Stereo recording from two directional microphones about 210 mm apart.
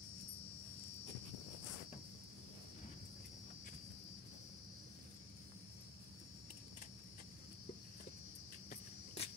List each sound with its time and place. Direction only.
8.6 s cricket: 30° left (ahead or behind)